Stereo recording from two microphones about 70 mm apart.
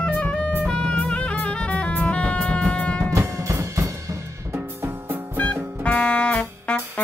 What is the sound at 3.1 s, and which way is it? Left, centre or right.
Music, right.